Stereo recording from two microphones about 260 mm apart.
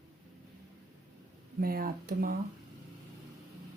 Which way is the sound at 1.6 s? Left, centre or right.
Right.